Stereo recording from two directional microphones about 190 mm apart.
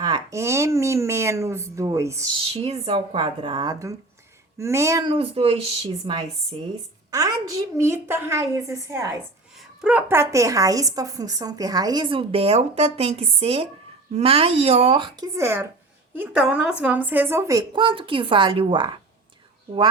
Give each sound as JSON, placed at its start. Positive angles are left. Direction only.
{"t": 0.0, "sound": "speech", "side_deg": -20}
{"t": 2.4, "sound": "a woman's voice", "side_deg": -30}
{"t": 5.1, "sound": "speech", "side_deg": -30}
{"t": 7.1, "sound": "a woman's voice", "side_deg": -20}
{"t": 15.4, "sound": "a woman's voice", "side_deg": -15}